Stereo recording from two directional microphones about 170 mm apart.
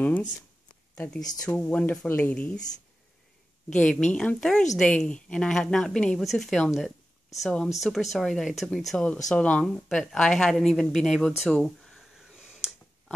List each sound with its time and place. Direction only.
0.7 s a sound: 5° left (ahead or behind)
1.2 s speech: 20° left (ahead or behind)
1.6 s speech: 10° left (ahead or behind)
3.7 s a woman's voice: 5° left (ahead or behind)